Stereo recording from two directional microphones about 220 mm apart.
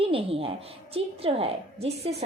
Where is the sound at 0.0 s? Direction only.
25° right (ahead or behind).